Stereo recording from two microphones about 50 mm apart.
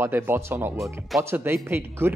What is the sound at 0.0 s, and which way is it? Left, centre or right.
Speech, right.